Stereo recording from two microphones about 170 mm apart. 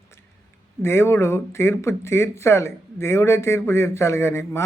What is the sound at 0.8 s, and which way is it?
Speech, 15° left (ahead or behind).